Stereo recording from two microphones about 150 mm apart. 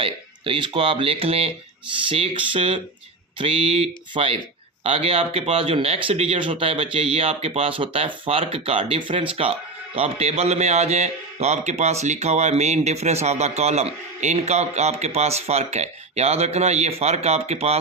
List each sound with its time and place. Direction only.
0.0 s speech: 35° right (ahead or behind)